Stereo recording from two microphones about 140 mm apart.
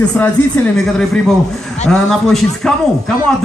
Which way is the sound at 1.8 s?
5° left (ahead or behind).